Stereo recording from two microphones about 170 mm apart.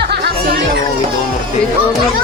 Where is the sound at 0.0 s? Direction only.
70° right (ahead or behind).